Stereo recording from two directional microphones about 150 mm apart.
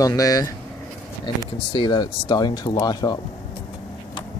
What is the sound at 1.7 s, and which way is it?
Speech, 30° left (ahead or behind).